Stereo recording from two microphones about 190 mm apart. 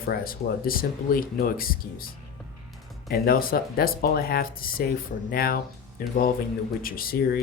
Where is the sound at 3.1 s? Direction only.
50° left (ahead or behind).